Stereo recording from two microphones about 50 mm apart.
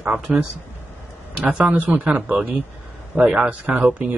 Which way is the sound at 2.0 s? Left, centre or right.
Right.